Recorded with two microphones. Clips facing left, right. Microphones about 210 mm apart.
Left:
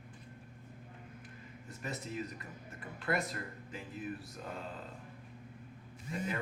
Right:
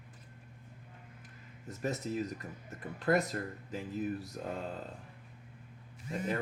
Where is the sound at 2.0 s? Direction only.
35° right (ahead or behind).